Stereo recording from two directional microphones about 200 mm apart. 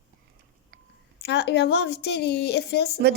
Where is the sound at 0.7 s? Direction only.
50° right (ahead or behind).